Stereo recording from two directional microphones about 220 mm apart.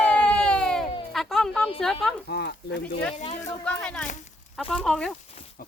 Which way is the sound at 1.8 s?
Centre (ahead or behind).